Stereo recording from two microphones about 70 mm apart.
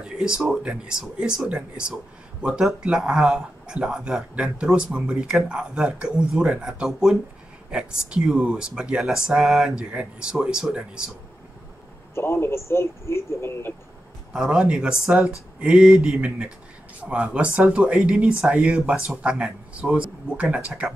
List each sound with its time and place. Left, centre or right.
0.0 s a sound: centre
0.6 s speech: centre
12.2 s speech: left
14.3 s speech: centre